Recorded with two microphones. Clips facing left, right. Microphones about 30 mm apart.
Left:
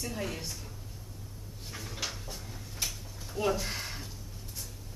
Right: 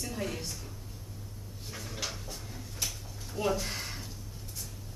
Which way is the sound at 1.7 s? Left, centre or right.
Centre.